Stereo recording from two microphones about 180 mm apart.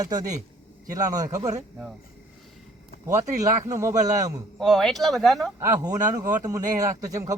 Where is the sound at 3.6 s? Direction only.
15° right (ahead or behind).